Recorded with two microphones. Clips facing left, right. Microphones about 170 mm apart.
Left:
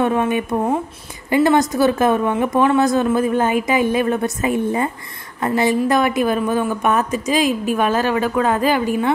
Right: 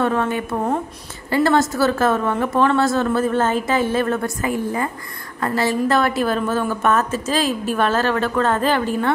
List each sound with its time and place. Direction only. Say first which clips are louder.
0.0 s a woman's voice: left 2 dB; 15° left (ahead or behind)